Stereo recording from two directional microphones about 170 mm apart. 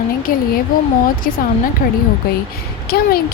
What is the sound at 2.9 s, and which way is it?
Speech, 65° left (ahead or behind).